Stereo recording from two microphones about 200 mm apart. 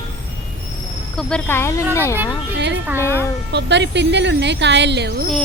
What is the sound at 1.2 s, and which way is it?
Speech, 5° left (ahead or behind).